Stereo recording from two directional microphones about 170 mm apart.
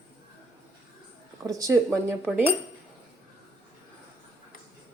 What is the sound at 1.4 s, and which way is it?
Speech, 20° right (ahead or behind).